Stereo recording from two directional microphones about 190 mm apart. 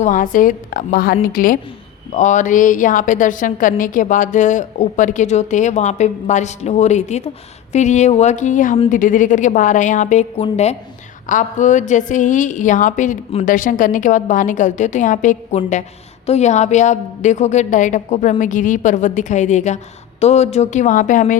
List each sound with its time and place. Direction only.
0.0 s a woman's voice: 45° left (ahead or behind)